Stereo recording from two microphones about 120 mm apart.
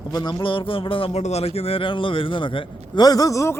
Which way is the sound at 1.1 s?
65° left (ahead or behind).